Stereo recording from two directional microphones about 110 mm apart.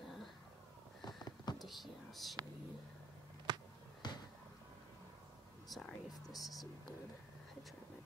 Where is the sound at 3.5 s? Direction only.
40° right (ahead or behind).